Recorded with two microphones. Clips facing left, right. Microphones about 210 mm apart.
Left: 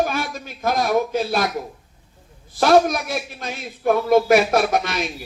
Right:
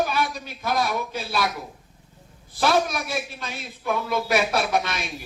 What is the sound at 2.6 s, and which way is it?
A man's voice, 50° left (ahead or behind).